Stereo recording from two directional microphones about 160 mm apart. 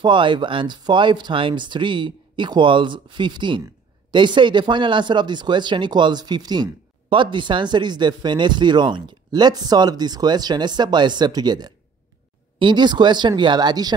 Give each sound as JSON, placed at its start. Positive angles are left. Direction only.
{"t": 0.0, "sound": "speech", "side_deg": -30}